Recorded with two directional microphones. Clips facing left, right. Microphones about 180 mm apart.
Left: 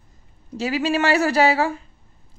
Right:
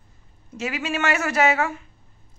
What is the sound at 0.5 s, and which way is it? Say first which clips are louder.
A woman's voice: left 6 dB; 35° left (ahead or behind).